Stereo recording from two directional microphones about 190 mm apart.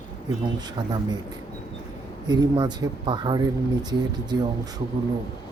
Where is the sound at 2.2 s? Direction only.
20° right (ahead or behind).